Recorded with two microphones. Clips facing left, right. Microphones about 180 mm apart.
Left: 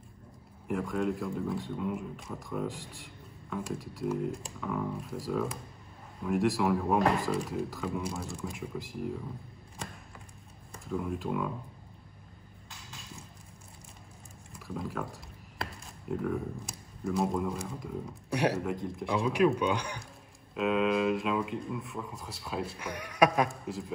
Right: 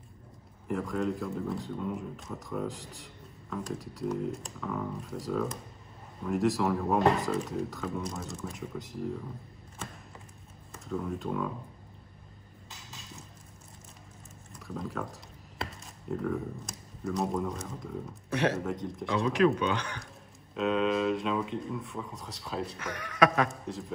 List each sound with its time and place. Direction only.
0.7 s speech: centre (ahead or behind)
10.7 s speech: centre (ahead or behind)
14.7 s speech: centre (ahead or behind)
18.3 s a man's voice: 10° left (ahead or behind)
18.6 s a man's voice: centre (ahead or behind)
23.6 s a man's voice: centre (ahead or behind)